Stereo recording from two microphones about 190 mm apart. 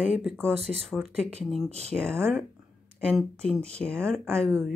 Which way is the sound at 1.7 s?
35° right (ahead or behind).